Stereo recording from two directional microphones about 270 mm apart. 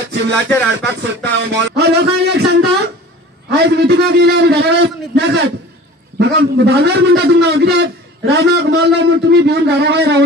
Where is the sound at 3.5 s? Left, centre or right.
Right.